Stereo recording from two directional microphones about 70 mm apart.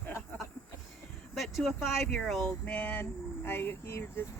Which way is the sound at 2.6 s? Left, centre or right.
Left.